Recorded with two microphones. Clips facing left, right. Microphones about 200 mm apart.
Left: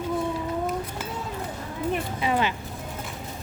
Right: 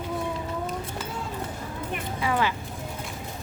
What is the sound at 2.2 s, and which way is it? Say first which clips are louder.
Music: right 1 dB; 20° left (ahead or behind).